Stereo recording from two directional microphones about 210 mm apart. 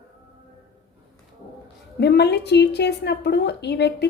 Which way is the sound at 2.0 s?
50° left (ahead or behind).